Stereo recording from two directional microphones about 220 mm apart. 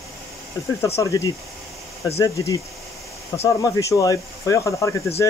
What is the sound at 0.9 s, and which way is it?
Speech, 15° left (ahead or behind).